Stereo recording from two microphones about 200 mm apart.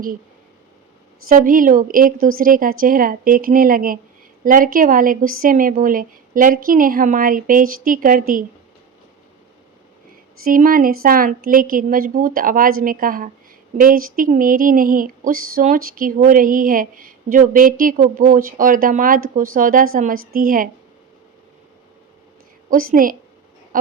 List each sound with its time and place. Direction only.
1.3 s speech: 45° right (ahead or behind)
10.4 s speech: 45° right (ahead or behind)
22.7 s speech: 45° right (ahead or behind)